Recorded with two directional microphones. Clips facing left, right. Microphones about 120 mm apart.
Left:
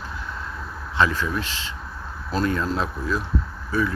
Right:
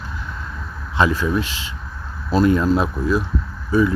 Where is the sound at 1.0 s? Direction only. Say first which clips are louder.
Right 4 dB; 15° right (ahead or behind).